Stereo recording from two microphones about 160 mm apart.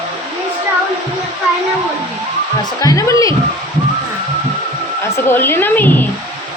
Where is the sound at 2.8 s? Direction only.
20° left (ahead or behind).